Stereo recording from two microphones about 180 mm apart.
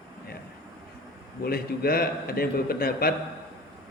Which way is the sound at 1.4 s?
60° left (ahead or behind).